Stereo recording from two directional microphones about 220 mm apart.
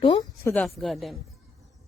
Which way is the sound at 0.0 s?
20° left (ahead or behind).